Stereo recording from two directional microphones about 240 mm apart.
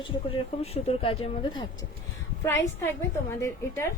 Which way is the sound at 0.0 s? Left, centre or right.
Left.